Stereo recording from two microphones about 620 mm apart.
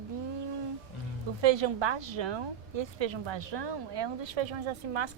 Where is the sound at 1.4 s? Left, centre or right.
Right.